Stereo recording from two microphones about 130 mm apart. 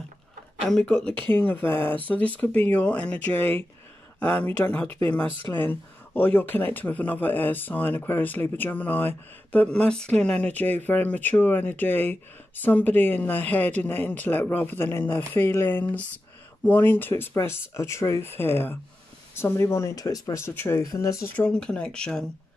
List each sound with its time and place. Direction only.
0.7 s speech: 5° left (ahead or behind); by 21.2 s 25° left (ahead or behind)
21.4 s speech: 5° left (ahead or behind)